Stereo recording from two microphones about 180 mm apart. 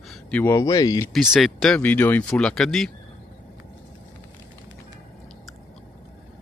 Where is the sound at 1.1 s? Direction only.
Centre (ahead or behind).